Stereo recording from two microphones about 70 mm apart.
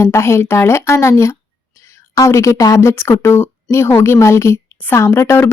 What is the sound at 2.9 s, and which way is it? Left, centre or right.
A woman's voice, left.